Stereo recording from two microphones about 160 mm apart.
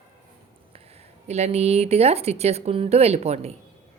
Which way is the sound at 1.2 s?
45° right (ahead or behind).